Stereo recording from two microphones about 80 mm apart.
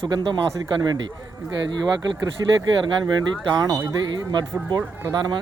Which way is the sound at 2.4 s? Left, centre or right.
Right.